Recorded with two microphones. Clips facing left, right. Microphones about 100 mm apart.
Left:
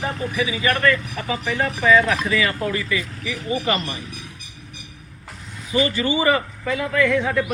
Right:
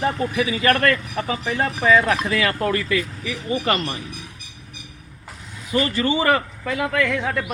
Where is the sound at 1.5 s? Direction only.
35° right (ahead or behind).